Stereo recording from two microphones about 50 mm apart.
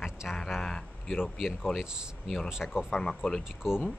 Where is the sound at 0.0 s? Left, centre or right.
Centre.